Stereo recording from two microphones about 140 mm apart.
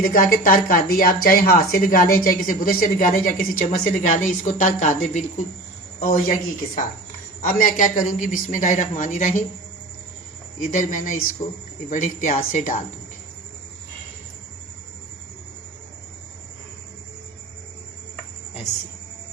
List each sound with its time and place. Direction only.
0.0 s speech: 85° left; by 5.2 s 60° left (ahead or behind)
6.0 s speech: 75° left (ahead or behind)
7.4 s a man's voice: 70° left (ahead or behind)
10.6 s a man's voice: 65° left (ahead or behind)